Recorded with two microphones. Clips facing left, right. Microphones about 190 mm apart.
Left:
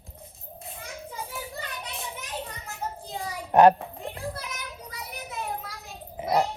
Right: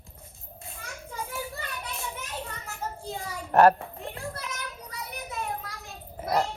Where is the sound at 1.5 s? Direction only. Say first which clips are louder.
Even; 20° left (ahead or behind).